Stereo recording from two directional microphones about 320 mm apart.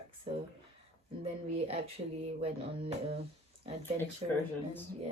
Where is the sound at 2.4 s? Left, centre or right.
Centre.